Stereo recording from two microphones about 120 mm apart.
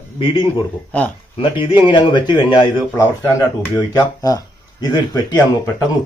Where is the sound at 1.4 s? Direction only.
45° left (ahead or behind).